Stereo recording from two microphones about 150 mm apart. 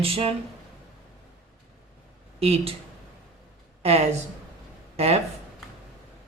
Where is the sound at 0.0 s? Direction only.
40° right (ahead or behind).